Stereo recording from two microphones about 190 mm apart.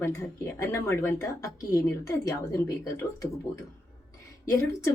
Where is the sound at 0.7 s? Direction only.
15° left (ahead or behind).